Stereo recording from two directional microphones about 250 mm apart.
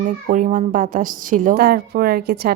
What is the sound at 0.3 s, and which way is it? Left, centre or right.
A woman's voice, right.